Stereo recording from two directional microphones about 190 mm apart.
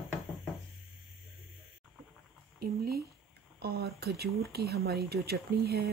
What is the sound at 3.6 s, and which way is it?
Speech, 55° right (ahead or behind).